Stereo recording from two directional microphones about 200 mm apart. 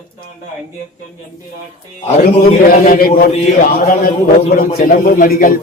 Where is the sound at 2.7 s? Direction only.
45° left (ahead or behind).